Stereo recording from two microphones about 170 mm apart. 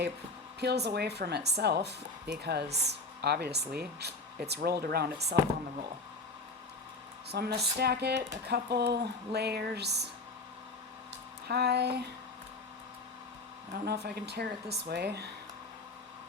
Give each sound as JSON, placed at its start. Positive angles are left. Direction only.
{"t": 0.6, "sound": "speech", "side_deg": -75}
{"t": 7.3, "sound": "speech", "side_deg": -70}
{"t": 11.4, "sound": "speech", "side_deg": -75}
{"t": 13.7, "sound": "speech", "side_deg": -70}